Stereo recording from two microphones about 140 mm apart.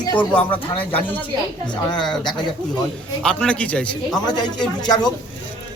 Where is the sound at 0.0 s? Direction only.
35° left (ahead or behind).